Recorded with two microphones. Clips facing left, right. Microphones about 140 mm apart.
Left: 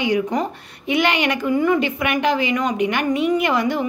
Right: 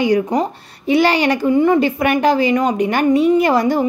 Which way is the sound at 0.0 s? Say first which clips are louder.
Right 4 dB; 40° right (ahead or behind).